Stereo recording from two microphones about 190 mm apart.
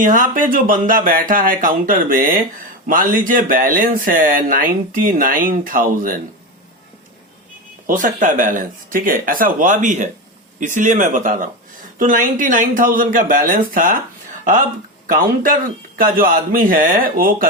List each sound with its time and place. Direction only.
0.0 s speech: 45° right (ahead or behind)
7.9 s speech: 45° right (ahead or behind)
15.0 s speech: 45° right (ahead or behind)